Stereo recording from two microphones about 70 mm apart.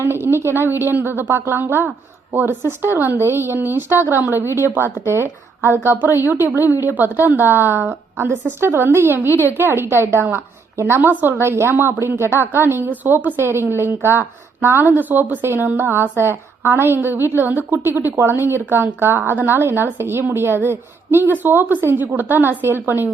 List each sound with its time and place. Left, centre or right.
0.0 s a woman's voice: right